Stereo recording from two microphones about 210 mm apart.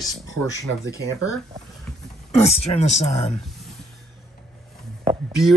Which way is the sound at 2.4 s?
30° left (ahead or behind).